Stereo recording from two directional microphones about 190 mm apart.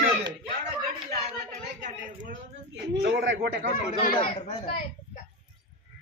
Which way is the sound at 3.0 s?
60° right (ahead or behind).